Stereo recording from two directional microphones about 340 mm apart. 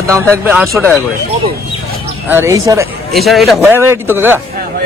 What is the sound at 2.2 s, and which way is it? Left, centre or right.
A man's voice, centre.